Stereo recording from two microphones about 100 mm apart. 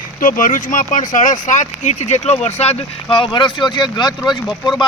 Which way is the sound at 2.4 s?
90° left.